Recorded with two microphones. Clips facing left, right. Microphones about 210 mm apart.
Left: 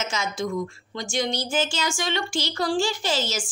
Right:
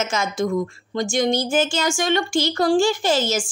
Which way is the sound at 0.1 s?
50° right (ahead or behind).